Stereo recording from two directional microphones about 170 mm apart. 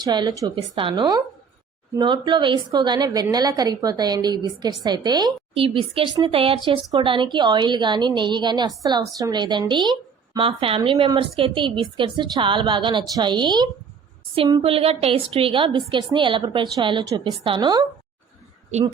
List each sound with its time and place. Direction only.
0.0 s a woman's voice: 25° right (ahead or behind)